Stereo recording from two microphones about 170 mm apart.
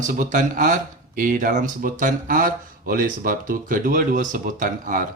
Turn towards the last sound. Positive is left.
turn(degrees=-55)  # may be behind; listen again after turning